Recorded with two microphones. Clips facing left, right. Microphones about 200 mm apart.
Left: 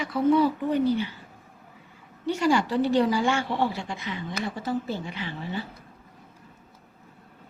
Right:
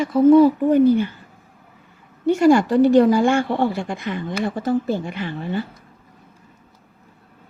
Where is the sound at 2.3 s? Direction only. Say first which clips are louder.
Right 9 dB; 50° right (ahead or behind).